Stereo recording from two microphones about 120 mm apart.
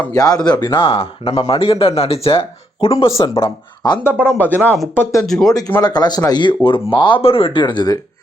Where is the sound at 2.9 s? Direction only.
30° left (ahead or behind).